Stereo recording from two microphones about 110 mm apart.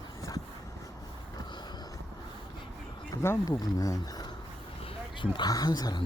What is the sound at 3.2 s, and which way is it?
Speech, 25° left (ahead or behind).